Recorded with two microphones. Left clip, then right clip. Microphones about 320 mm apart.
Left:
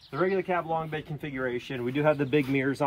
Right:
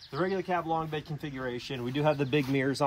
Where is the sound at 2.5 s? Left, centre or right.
Right.